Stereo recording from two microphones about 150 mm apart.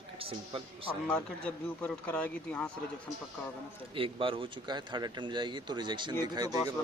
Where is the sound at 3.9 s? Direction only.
35° right (ahead or behind).